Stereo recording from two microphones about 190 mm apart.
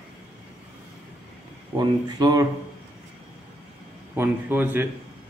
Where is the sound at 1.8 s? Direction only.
20° right (ahead or behind).